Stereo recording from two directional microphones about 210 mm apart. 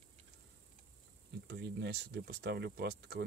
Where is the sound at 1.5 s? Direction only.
55° right (ahead or behind).